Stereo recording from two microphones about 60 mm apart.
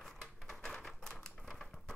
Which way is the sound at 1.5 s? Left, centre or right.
Centre.